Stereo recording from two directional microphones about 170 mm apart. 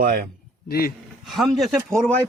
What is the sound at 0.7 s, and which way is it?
Speech, 60° left (ahead or behind).